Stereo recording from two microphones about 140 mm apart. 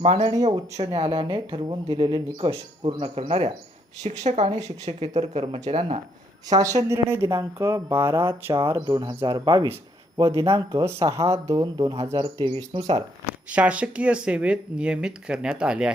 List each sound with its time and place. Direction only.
0.0 s speech: 50° right (ahead or behind)
0.5 s speech: 25° right (ahead or behind)
0.9 s speech: 40° right (ahead or behind)
6.5 s speech: 25° right (ahead or behind)
13.5 s speech: 10° right (ahead or behind)